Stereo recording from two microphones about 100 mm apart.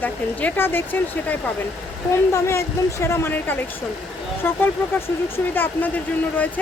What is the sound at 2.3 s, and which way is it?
Speech, 30° left (ahead or behind).